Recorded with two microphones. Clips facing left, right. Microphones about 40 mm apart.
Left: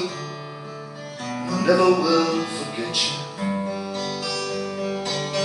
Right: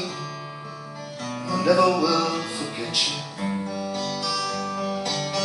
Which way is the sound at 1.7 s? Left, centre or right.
Centre.